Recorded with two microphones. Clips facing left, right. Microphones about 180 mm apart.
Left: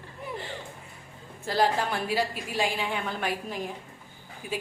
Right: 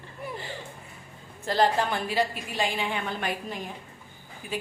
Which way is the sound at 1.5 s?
5° left (ahead or behind).